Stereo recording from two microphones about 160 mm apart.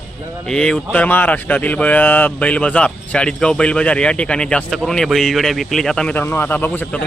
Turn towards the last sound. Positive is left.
turn(degrees=10)  # may be behind; listen again after turning